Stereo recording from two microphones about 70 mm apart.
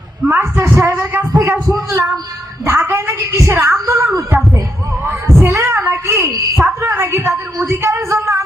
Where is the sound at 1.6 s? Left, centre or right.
Right.